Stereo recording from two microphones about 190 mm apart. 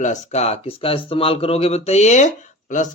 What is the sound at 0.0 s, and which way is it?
Speech, 35° left (ahead or behind).